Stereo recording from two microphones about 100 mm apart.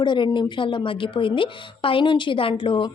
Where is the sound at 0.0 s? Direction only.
50° left (ahead or behind).